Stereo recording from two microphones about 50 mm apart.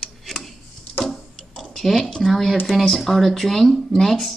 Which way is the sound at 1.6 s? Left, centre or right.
Centre.